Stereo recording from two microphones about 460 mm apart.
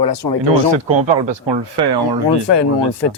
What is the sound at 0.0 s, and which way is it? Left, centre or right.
Speech, left.